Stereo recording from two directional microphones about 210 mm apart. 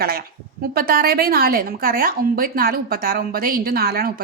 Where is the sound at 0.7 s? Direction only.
45° right (ahead or behind).